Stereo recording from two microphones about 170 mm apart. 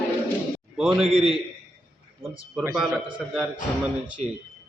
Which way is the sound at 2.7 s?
Centre (ahead or behind).